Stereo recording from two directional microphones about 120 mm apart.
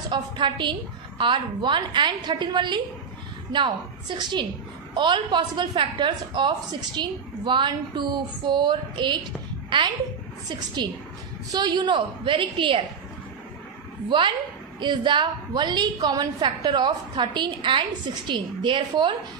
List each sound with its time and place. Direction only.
0.1 s a woman's voice: 40° right (ahead or behind)
4.2 s a woman's voice: 40° right (ahead or behind)
14.0 s a woman's voice: 40° right (ahead or behind)